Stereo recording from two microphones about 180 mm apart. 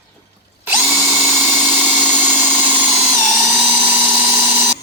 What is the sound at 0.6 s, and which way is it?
Drill, 10° right (ahead or behind).